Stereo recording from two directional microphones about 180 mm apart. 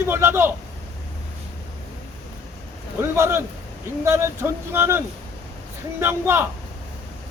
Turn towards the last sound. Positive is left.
turn(degrees=-15)  # may be behind; listen again after turning